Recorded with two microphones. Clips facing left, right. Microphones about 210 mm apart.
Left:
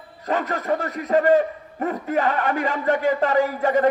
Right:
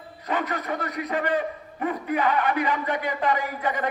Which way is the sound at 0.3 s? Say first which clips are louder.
Left 5 dB; 40° left (ahead or behind).